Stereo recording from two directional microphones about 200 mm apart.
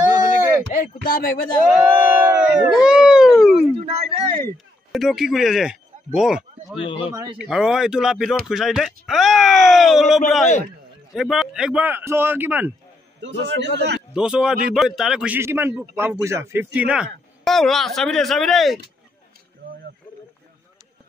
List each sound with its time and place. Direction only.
1.0 s speech: 45° left (ahead or behind)
1.8 s speech: 10° right (ahead or behind)
3.7 s speech: 30° right (ahead or behind)
4.9 s a man's voice: centre (ahead or behind)
6.8 s a man's voice: 25° left (ahead or behind)
7.3 s a man's voice: 5° right (ahead or behind)
13.2 s a man's voice: 60° right (ahead or behind)
14.1 s speech: 5° right (ahead or behind)
19.6 s a sound: 70° right (ahead or behind)